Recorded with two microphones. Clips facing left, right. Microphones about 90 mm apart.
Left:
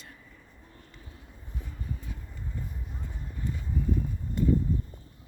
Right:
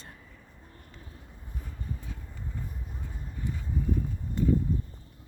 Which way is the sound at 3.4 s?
15° right (ahead or behind).